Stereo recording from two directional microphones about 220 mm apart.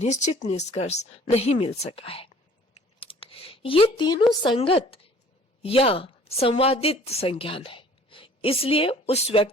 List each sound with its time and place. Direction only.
0.0 s a woman's voice: 30° left (ahead or behind)